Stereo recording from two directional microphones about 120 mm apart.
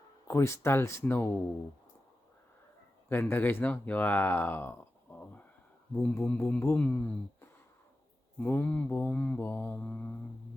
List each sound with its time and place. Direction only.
0.3 s speech: 20° left (ahead or behind)
3.1 s mantra: 15° left (ahead or behind)
6.0 s mantra: 10° left (ahead or behind)
8.4 s mantra: 15° left (ahead or behind)